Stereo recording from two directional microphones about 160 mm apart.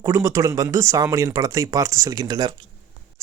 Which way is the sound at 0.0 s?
20° right (ahead or behind).